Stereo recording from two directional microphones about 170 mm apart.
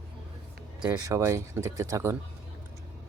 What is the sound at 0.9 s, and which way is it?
Speech, 20° right (ahead or behind).